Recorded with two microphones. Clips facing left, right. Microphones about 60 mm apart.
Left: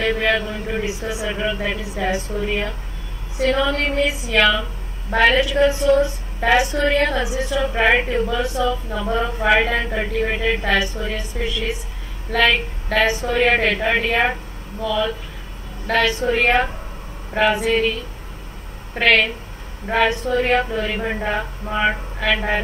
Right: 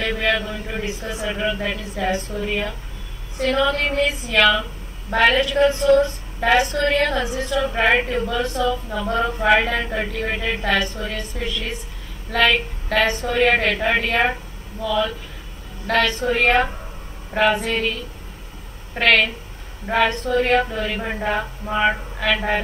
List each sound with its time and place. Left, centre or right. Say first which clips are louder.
0.0 s a woman's voice: left 2 dB; centre
18.9 s a woman's voice: left 1 dB; centre